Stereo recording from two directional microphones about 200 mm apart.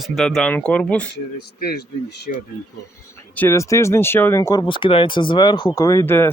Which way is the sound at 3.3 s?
10° left (ahead or behind).